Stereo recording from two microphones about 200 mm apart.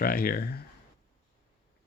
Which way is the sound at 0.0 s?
45° left (ahead or behind).